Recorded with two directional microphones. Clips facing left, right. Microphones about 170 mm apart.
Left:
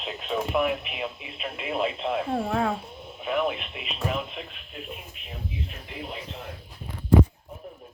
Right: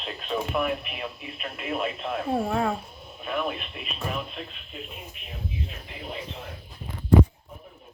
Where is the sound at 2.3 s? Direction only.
5° right (ahead or behind).